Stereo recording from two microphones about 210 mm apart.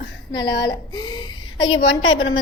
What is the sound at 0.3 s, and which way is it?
A woman's voice, 20° left (ahead or behind).